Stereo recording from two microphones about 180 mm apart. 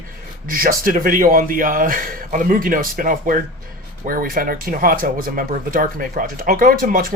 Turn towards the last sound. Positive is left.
turn(degrees=-50)  # may be behind; listen again after turning